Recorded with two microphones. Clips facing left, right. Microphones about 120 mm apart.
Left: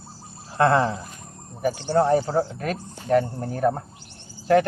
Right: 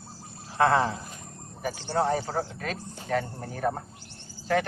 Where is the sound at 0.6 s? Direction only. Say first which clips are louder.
Left 3 dB; 55° left (ahead or behind).